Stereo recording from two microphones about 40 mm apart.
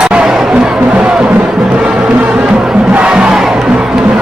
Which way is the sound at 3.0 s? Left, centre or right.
Right.